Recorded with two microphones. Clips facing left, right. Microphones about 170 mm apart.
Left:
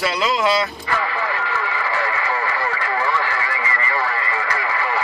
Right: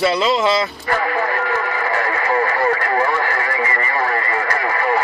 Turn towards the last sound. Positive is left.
turn(degrees=-50)  # may be behind; listen again after turning